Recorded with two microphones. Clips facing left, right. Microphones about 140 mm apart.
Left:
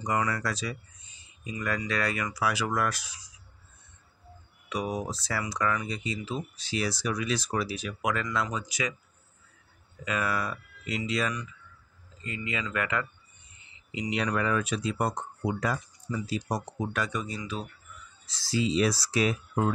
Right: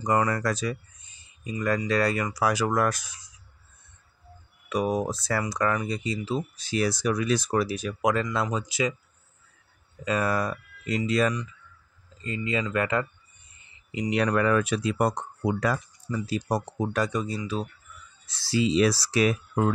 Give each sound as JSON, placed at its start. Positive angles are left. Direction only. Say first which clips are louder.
{"t": 0.0, "sound": "speech", "louder": "right 5 dB", "side_deg": -45}
{"t": 1.4, "sound": "speech", "louder": "right 5 dB", "side_deg": -35}
{"t": 4.6, "sound": "speech", "louder": "right 6 dB", "side_deg": -50}
{"t": 10.0, "sound": "speech", "louder": "right 4 dB", "side_deg": -40}
{"t": 12.2, "sound": "speech", "louder": "right 6 dB", "side_deg": -35}
{"t": 13.9, "sound": "speech", "louder": "right 5 dB", "side_deg": -50}
{"t": 16.1, "sound": "speech", "louder": "right 4 dB", "side_deg": -55}
{"t": 18.2, "sound": "speech", "louder": "right 3 dB", "side_deg": -60}